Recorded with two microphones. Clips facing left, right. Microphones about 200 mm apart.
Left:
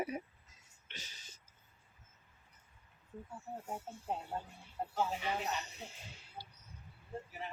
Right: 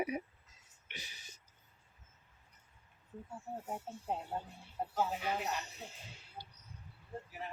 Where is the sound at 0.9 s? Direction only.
15° right (ahead or behind).